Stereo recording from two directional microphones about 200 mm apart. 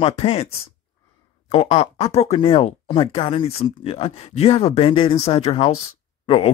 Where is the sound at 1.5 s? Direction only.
30° left (ahead or behind).